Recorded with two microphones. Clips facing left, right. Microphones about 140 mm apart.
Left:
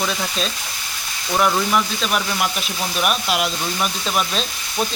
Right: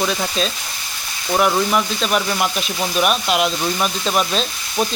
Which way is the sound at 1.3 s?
10° right (ahead or behind).